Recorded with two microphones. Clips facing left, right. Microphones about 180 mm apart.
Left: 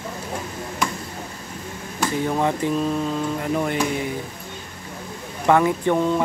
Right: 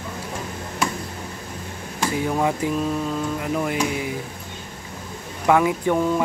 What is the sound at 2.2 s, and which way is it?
Speech, 5° right (ahead or behind).